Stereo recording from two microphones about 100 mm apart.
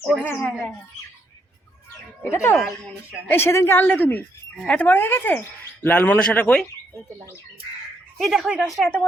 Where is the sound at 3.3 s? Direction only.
25° left (ahead or behind).